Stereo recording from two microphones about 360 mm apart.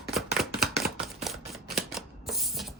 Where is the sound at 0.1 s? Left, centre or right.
Centre.